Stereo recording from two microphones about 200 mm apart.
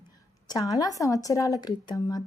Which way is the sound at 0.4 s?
20° left (ahead or behind).